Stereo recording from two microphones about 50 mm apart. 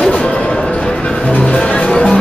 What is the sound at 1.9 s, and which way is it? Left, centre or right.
Music, centre.